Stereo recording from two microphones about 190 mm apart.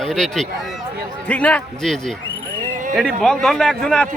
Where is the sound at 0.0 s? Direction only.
Centre (ahead or behind).